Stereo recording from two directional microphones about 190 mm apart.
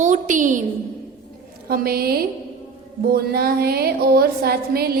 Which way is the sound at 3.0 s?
55° right (ahead or behind).